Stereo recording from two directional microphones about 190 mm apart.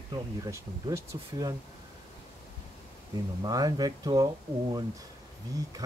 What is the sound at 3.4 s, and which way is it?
Speech, 20° right (ahead or behind).